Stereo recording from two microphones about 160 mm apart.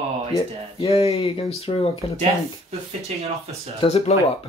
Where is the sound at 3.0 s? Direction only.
40° right (ahead or behind).